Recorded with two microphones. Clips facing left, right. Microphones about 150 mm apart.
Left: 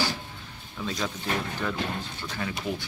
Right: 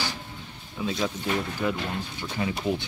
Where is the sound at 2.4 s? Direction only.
20° right (ahead or behind).